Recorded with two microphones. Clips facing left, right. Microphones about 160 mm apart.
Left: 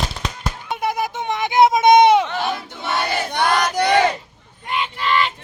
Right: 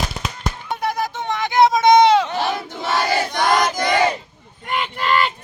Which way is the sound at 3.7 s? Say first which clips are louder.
Left 3 dB; 65° left (ahead or behind).